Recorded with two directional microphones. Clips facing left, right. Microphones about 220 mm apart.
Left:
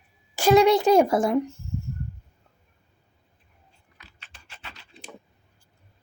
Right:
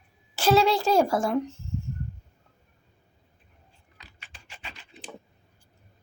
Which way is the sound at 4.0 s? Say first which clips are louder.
Right 1 dB; 15° right (ahead or behind).